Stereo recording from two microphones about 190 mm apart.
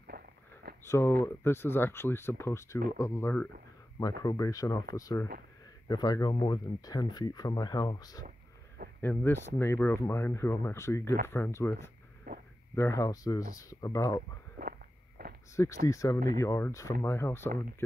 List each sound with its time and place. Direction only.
0.1 s a sound: 50° right (ahead or behind)
0.8 s speech: 15° left (ahead or behind)
12.3 s a sound: 45° right (ahead or behind)
12.7 s speech: 15° left (ahead or behind)
14.6 s walk: 50° right (ahead or behind)
15.5 s speech: 15° left (ahead or behind)